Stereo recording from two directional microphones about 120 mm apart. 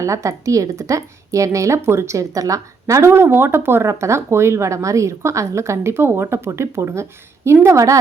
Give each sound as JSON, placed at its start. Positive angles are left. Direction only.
{"t": 0.0, "sound": "a woman's voice", "side_deg": -25}